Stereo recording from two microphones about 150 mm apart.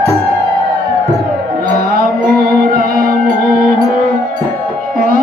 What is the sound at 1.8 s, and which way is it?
Music, 85° right.